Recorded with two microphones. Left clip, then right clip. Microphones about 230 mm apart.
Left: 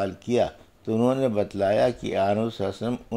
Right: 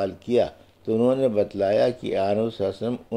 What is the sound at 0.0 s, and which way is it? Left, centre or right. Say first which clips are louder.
Speech: right 2 dB; left.